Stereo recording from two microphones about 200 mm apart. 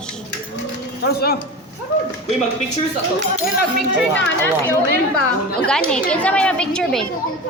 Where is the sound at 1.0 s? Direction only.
50° left (ahead or behind).